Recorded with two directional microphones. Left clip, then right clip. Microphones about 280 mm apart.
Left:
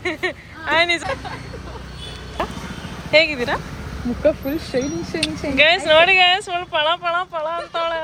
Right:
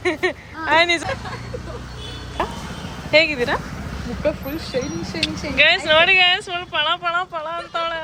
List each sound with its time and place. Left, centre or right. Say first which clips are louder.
0.0 s a sound: right 2 dB; centre
3.1 s speech: even; centre
4.3 s speech: left 4 dB; left
5.2 s speech: even; centre